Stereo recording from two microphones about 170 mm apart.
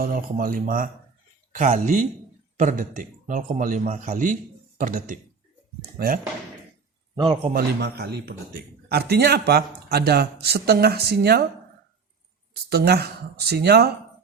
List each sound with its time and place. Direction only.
0.0 s a man's voice: 55° right (ahead or behind)
7.2 s speech: 25° right (ahead or behind)
7.5 s a man's voice: 75° right (ahead or behind)
12.7 s a man's voice: 70° right (ahead or behind)